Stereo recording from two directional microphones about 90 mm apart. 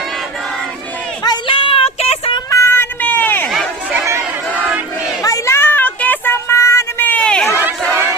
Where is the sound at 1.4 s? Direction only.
75° left (ahead or behind).